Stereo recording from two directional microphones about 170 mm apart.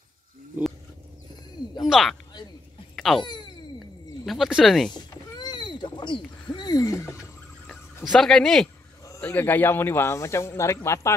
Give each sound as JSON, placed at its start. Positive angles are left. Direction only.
{"t": 1.8, "sound": "speech", "side_deg": 0}
{"t": 3.0, "sound": "a sound", "side_deg": 0}
{"t": 4.3, "sound": "speech", "side_deg": 0}
{"t": 4.9, "sound": "a sound", "side_deg": 25}
{"t": 8.0, "sound": "speech", "side_deg": 5}
{"t": 9.0, "sound": "speech", "side_deg": 15}